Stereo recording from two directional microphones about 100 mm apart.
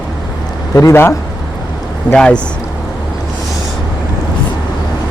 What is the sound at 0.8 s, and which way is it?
Speech, 30° left (ahead or behind).